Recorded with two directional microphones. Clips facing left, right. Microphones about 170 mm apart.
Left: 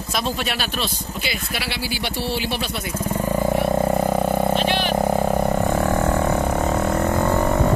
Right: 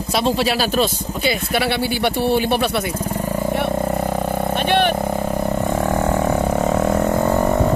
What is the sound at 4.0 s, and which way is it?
Vehicle, 5° left (ahead or behind).